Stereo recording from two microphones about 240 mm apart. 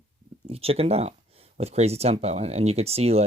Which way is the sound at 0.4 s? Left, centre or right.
Right.